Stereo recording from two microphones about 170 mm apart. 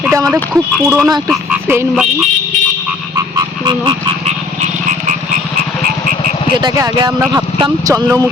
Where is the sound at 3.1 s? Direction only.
25° right (ahead or behind).